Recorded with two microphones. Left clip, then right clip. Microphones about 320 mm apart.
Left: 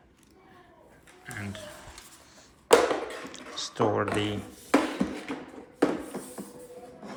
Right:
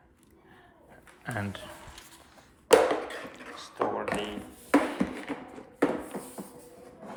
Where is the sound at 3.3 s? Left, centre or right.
Left.